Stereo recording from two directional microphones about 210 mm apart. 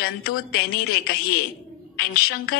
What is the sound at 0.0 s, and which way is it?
A woman's voice, 45° left (ahead or behind).